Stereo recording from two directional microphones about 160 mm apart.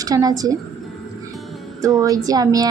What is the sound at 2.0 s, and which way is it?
Speech, 20° right (ahead or behind).